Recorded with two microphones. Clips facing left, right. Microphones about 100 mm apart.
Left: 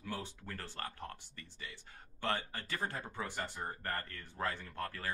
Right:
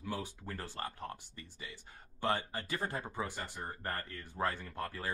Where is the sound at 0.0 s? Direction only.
15° right (ahead or behind).